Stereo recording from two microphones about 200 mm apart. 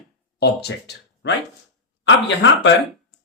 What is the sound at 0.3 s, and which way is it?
Speech, 55° left (ahead or behind).